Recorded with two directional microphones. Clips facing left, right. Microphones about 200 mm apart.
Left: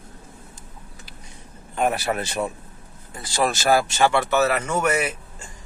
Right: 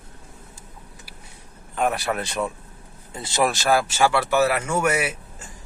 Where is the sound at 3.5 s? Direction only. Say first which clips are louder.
Left 1 dB; centre (ahead or behind).